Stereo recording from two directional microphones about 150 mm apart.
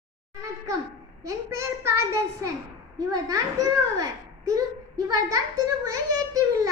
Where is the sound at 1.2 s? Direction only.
20° right (ahead or behind).